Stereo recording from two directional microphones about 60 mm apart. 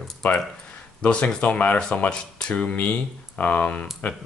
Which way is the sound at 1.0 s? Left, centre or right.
Left.